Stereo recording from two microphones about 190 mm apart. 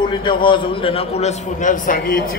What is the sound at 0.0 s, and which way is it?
A man's voice, 25° left (ahead or behind).